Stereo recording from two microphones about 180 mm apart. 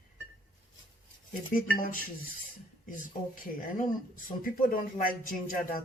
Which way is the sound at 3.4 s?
50° left (ahead or behind).